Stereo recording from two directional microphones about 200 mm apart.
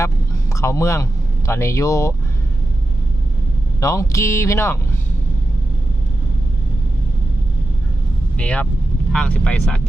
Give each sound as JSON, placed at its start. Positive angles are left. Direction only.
{"t": 0.5, "sound": "speech", "side_deg": 15}
{"t": 3.8, "sound": "speech", "side_deg": 15}
{"t": 8.4, "sound": "speech", "side_deg": 5}